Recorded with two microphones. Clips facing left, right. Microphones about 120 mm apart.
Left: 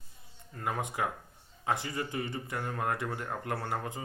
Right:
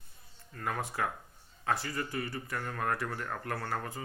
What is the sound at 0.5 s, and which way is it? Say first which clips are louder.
Speech: left 1 dB; 20° left (ahead or behind).